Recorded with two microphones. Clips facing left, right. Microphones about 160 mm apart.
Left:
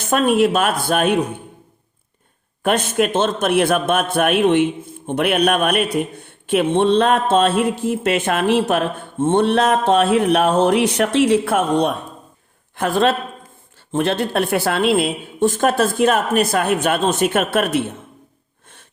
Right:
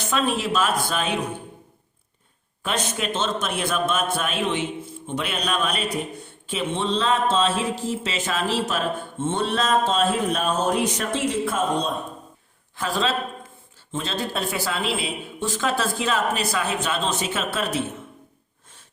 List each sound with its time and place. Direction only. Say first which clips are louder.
0.0 s a man's voice: left 9 dB; 50° left (ahead or behind)
2.6 s a man's voice: left 9 dB; 55° left (ahead or behind); by 11.9 s 70° left (ahead or behind)
12.7 s a man's voice: left 7 dB; 55° left (ahead or behind)